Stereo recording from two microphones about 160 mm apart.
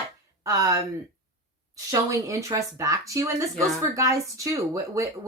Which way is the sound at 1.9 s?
20° right (ahead or behind).